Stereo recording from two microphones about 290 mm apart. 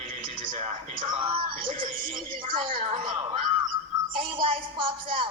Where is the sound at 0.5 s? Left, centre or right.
Centre.